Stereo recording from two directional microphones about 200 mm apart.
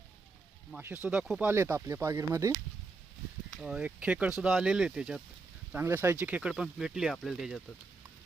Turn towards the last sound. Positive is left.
turn(degrees=0)  # may be behind; listen again after turning